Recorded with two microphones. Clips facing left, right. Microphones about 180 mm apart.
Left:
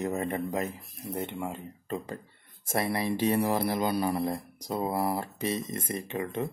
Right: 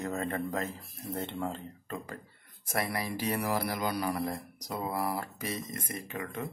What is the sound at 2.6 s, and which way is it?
Speech, 25° left (ahead or behind).